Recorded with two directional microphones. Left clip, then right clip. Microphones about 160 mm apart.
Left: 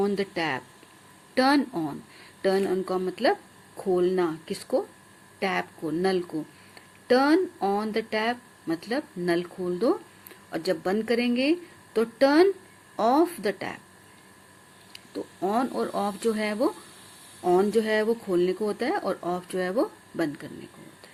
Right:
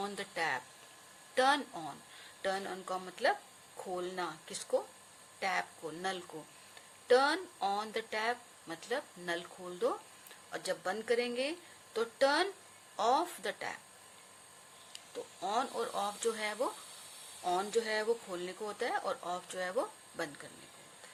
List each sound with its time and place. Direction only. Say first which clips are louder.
0.0 s speech: left 10 dB; 15° left (ahead or behind)
15.4 s speech: left 8 dB; 25° left (ahead or behind)